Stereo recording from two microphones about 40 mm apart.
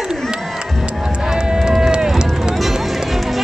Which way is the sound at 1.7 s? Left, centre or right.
Centre.